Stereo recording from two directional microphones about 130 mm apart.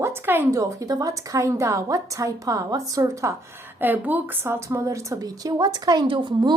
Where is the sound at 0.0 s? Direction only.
15° right (ahead or behind).